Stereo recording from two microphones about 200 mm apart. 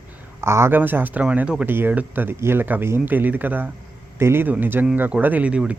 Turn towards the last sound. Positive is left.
turn(degrees=-5)  # may be behind; listen again after turning